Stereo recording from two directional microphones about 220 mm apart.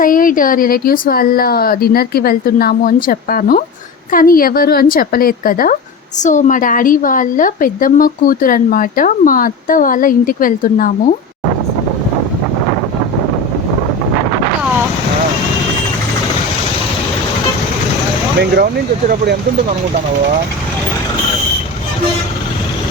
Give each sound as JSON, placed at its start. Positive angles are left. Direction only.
{"t": 0.0, "sound": "a woman's voice", "side_deg": 40}
{"t": 18.5, "sound": "speech", "side_deg": -45}